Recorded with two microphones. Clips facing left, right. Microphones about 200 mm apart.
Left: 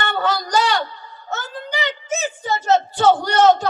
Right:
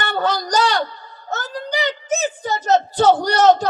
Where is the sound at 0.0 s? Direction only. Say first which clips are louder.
Right 1 dB; 35° right (ahead or behind).